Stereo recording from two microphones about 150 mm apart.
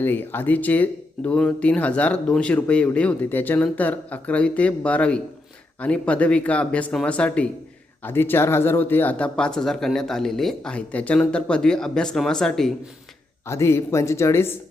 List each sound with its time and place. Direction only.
0.0 s speech: 15° left (ahead or behind)
13.5 s speech: 20° left (ahead or behind)